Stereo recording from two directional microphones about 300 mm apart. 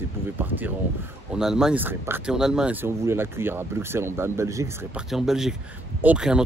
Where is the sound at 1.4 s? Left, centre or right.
Centre.